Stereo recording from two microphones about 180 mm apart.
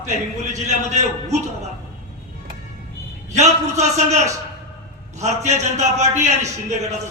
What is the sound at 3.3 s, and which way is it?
Speech, 40° right (ahead or behind).